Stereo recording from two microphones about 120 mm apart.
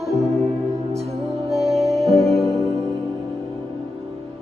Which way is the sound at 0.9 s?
60° right (ahead or behind).